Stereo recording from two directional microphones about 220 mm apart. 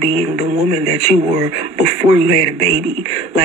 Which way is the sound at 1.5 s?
45° left (ahead or behind).